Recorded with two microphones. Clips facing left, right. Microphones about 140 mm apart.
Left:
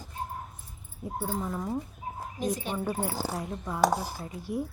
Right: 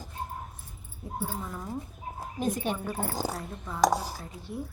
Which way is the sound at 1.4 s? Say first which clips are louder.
Left 5 dB; 20° left (ahead or behind).